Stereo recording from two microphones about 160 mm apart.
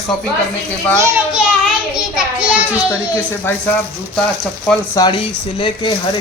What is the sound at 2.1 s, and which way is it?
Speech, 5° right (ahead or behind).